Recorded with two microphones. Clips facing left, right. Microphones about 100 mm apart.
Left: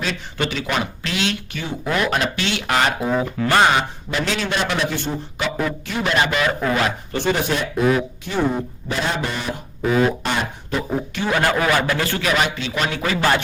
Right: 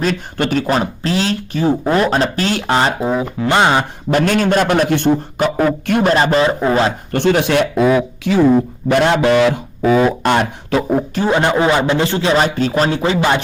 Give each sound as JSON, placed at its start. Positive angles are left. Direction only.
{"t": 0.0, "sound": "speech", "side_deg": -45}
{"t": 2.7, "sound": "a man's voice", "side_deg": -25}
{"t": 3.1, "sound": "a man's voice", "side_deg": -15}
{"t": 3.8, "sound": "a man's voice", "side_deg": -50}
{"t": 5.4, "sound": "a man's voice", "side_deg": -50}
{"t": 6.1, "sound": "speech", "side_deg": -35}
{"t": 7.1, "sound": "a man's voice", "side_deg": -65}
{"t": 8.3, "sound": "speech", "side_deg": -90}
{"t": 8.9, "sound": "a man's voice", "side_deg": -65}
{"t": 10.2, "sound": "a man's voice", "side_deg": -75}
{"t": 11.3, "sound": "a man's voice", "side_deg": -25}